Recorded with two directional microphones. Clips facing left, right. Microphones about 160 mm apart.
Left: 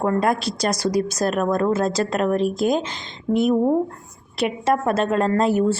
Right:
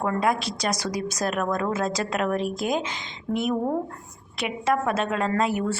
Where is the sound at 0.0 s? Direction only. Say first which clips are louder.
Left 4 dB; 40° left (ahead or behind).